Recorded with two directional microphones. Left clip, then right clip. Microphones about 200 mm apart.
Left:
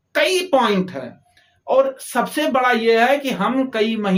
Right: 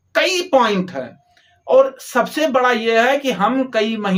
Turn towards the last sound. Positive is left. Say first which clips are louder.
# right 1 dB
turn(degrees=-20)  # may be behind; listen again after turning